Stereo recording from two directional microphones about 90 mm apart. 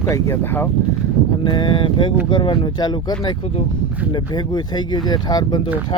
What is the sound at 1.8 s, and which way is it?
Speech, 65° left (ahead or behind).